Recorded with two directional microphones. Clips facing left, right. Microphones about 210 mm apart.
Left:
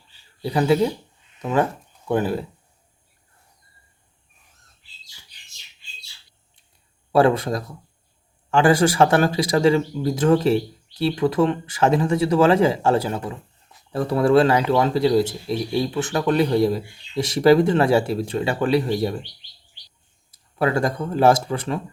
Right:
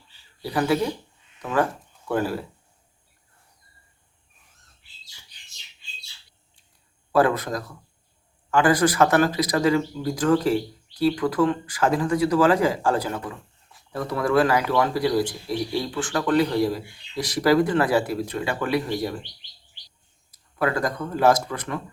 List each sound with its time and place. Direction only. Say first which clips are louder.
0.4 s speech: left 4 dB; 25° left (ahead or behind)
7.1 s speech: left 3 dB; 25° left (ahead or behind)
20.6 s speech: left 3 dB; 25° left (ahead or behind)